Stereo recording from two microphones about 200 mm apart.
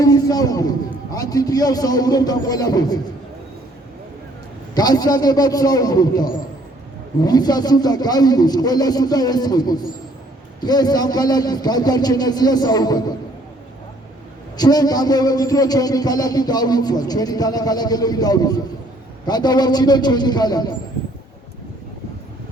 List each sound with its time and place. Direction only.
0.0 s a man's voice: 20° left (ahead or behind)
4.7 s a man's voice: 20° left (ahead or behind)
14.5 s a man's voice: 20° left (ahead or behind)